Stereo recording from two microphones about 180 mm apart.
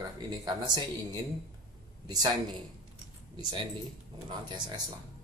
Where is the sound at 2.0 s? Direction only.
20° right (ahead or behind).